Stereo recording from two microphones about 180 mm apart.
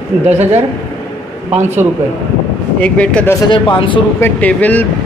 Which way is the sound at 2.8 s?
5° left (ahead or behind).